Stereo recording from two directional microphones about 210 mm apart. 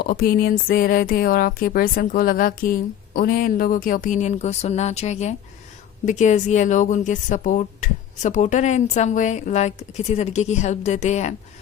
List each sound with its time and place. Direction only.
0.0 s speech: 45° left (ahead or behind)